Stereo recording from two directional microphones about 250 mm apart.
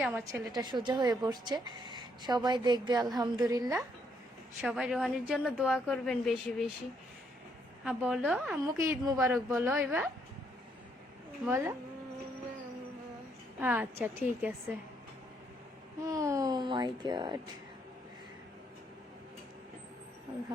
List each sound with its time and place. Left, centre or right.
0.0 s a woman's voice: centre
4.6 s a woman's voice: centre
7.9 s a woman's voice: centre
8.6 s a woman's voice: centre
11.4 s a woman's voice: centre
13.6 s a woman's voice: centre
16.0 s a woman's voice: centre